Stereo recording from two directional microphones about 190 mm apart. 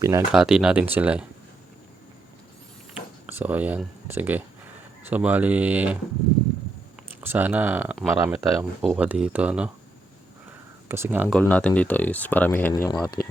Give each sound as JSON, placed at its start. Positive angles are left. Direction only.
{"t": 0.0, "sound": "speech", "side_deg": -15}
{"t": 0.3, "sound": "speech", "side_deg": -5}
{"t": 2.9, "sound": "speech", "side_deg": -10}
{"t": 7.2, "sound": "speech", "side_deg": -10}
{"t": 8.1, "sound": "speech", "side_deg": -15}
{"t": 8.9, "sound": "speech", "side_deg": -5}
{"t": 10.8, "sound": "speech", "side_deg": -15}
{"t": 11.3, "sound": "speech", "side_deg": 5}